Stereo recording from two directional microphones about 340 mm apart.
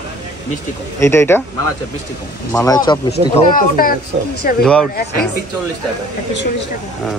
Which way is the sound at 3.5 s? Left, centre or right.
Left.